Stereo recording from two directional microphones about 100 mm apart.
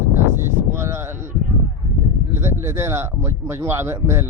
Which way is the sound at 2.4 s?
25° right (ahead or behind).